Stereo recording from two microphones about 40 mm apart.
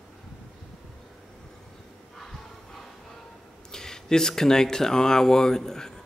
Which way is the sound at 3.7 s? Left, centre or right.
Centre.